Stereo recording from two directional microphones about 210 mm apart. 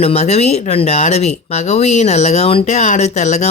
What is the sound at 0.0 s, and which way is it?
Speech, 30° left (ahead or behind).